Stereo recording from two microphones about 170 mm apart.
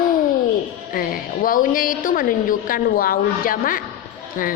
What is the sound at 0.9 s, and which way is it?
A woman's voice, 55° left (ahead or behind).